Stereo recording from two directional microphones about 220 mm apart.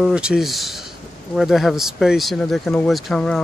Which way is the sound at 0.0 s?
5° right (ahead or behind).